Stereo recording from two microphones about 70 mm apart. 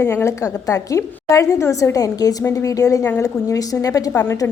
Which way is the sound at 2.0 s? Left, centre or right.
Left.